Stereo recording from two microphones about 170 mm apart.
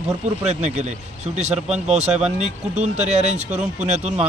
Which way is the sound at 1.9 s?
40° right (ahead or behind).